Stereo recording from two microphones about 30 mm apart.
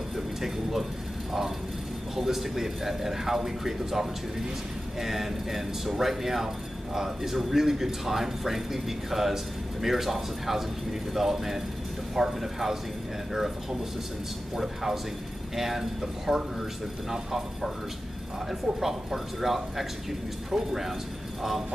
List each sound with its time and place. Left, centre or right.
0.4 s speech: centre
2.1 s a man's voice: centre